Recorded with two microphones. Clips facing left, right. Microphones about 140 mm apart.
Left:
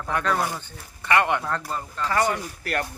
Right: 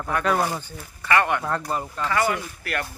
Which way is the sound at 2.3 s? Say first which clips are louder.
Even; 35° left (ahead or behind).